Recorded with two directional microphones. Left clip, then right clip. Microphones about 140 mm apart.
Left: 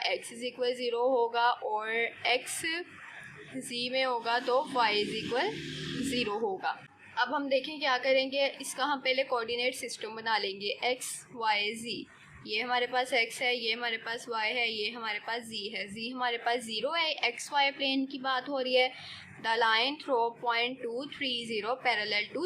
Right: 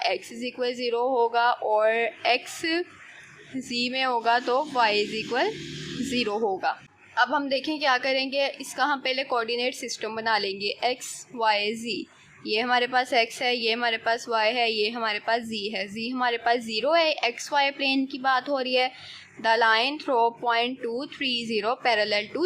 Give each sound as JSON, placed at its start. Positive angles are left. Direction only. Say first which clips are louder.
{"t": 0.0, "sound": "a woman's voice", "louder": "right 5 dB", "side_deg": -35}